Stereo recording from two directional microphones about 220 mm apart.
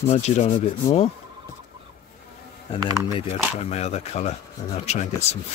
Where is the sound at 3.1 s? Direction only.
25° left (ahead or behind).